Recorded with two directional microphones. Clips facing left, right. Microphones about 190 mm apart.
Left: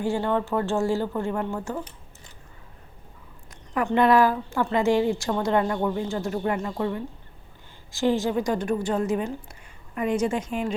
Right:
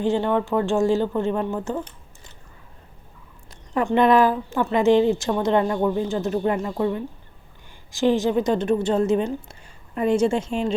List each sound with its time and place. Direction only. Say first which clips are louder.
0.0 s a woman's voice: right 3 dB; 20° right (ahead or behind)
3.8 s a woman's voice: right 2 dB; 20° right (ahead or behind)